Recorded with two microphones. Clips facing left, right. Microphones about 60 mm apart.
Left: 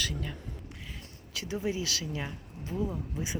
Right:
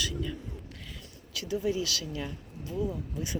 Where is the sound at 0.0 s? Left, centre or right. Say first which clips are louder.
Right 2 dB; left.